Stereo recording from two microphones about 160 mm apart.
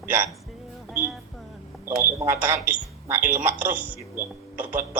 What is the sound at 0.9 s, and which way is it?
Speech, 10° right (ahead or behind).